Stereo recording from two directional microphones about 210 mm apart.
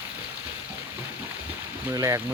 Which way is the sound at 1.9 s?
15° right (ahead or behind).